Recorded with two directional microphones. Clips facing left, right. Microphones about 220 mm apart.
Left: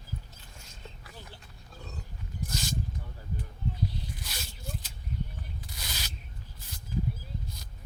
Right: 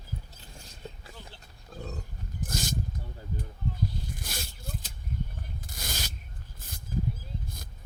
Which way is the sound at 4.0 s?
50° right (ahead or behind).